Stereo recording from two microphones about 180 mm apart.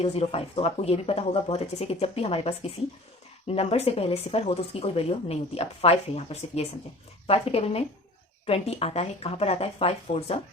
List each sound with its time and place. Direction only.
0.0 s speech: 35° left (ahead or behind)